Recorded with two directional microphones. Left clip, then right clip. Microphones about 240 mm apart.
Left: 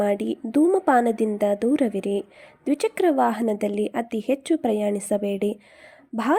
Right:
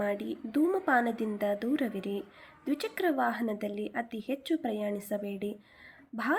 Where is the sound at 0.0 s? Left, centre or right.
Left.